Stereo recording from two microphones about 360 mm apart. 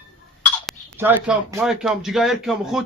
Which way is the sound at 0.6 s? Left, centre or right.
Centre.